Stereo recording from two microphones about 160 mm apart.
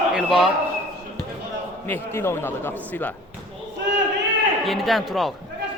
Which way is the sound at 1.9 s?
15° left (ahead or behind).